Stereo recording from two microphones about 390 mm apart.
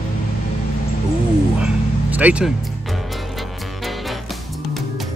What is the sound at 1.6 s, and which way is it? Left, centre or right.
Vehicle, centre.